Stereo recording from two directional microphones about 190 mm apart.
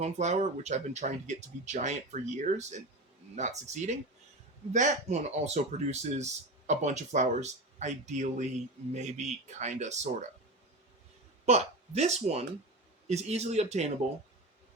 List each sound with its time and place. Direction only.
0.0 s speech: 35° right (ahead or behind)
11.4 s speech: 35° right (ahead or behind)